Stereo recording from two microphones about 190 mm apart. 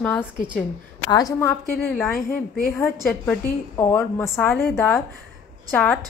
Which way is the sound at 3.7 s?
15° left (ahead or behind).